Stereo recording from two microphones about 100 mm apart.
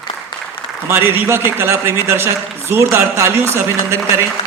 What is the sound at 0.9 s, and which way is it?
A man's voice, 20° right (ahead or behind).